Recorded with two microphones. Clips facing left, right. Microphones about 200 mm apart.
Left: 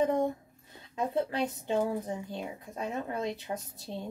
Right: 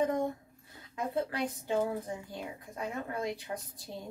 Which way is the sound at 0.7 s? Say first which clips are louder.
Left 3 dB; 20° left (ahead or behind).